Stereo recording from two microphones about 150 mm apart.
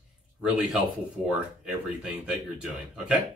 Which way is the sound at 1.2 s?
5° right (ahead or behind).